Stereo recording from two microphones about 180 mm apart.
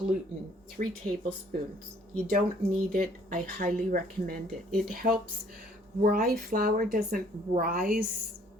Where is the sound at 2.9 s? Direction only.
55° right (ahead or behind).